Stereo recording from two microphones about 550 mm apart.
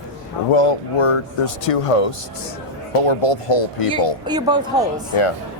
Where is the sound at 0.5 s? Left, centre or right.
Left.